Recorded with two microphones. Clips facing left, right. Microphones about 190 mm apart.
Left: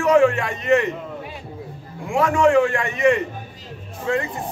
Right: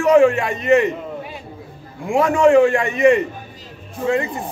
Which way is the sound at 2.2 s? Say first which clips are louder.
Right 4 dB; 15° right (ahead or behind).